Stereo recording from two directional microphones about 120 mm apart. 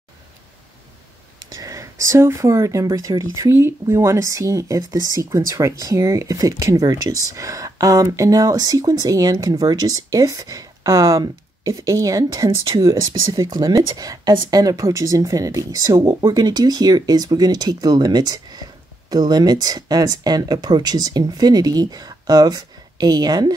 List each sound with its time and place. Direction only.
1.5 s speech: 30° right (ahead or behind)
12.4 s speech: 40° right (ahead or behind)